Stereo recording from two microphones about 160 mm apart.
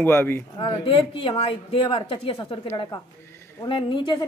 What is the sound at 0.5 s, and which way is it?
A woman's voice, 35° left (ahead or behind).